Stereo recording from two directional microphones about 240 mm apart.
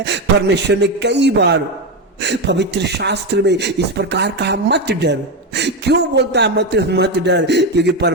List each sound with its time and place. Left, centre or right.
0.0 s speech: right